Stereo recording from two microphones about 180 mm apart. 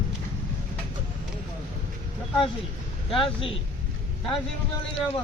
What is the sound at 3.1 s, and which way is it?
Speech, 30° left (ahead or behind).